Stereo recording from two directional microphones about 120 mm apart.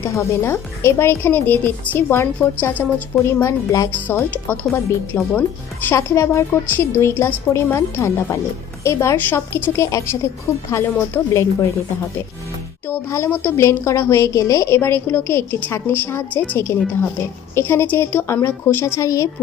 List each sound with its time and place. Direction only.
0.1 s a woman's voice: 25° left (ahead or behind)
12.9 s a woman's voice: 20° left (ahead or behind)